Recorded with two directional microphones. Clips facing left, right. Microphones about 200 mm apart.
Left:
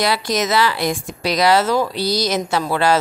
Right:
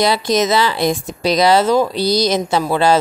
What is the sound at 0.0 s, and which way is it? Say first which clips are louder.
Speech: right 4 dB; 20° right (ahead or behind).